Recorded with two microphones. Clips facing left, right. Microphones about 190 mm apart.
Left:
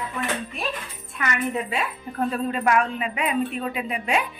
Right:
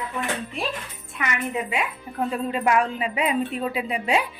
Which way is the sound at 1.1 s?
15° right (ahead or behind).